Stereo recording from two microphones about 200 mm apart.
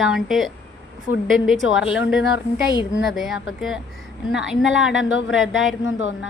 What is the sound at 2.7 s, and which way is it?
Speech, 20° left (ahead or behind).